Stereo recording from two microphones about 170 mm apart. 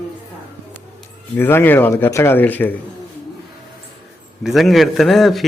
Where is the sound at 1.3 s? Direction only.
10° left (ahead or behind).